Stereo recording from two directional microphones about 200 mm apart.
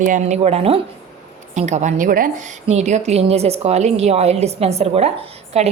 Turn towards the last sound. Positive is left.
turn(degrees=-35)  # may be behind; listen again after turning